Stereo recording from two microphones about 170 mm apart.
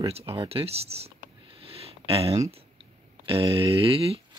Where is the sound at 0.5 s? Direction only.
35° right (ahead or behind).